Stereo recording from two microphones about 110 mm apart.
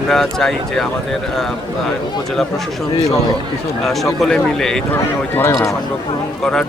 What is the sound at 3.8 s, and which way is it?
Speech, centre (ahead or behind).